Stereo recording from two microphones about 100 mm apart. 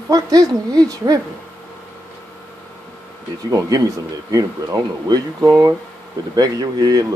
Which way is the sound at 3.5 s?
35° right (ahead or behind).